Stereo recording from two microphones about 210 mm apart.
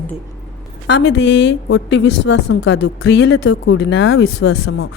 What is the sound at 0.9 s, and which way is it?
A woman's voice, 55° left (ahead or behind).